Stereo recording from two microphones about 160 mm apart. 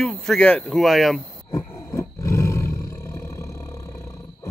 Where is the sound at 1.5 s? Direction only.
20° left (ahead or behind).